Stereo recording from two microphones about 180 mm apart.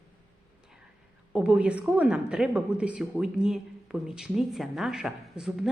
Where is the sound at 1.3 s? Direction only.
5° right (ahead or behind).